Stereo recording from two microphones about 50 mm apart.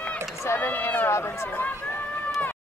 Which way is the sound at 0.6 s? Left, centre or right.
Left.